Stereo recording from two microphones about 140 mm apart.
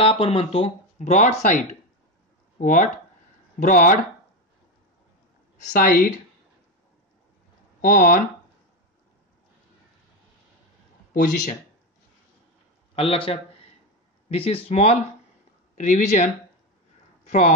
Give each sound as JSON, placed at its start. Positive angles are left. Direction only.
{"t": 0.0, "sound": "speech", "side_deg": 40}
{"t": 5.6, "sound": "speech", "side_deg": 75}
{"t": 7.8, "sound": "speech", "side_deg": 70}
{"t": 12.9, "sound": "a man's voice", "side_deg": 40}
{"t": 17.3, "sound": "a woman's voice", "side_deg": 60}